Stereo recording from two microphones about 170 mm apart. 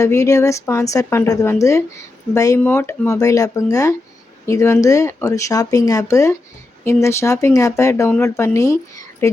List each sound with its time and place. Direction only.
0.0 s a woman's voice: 20° left (ahead or behind)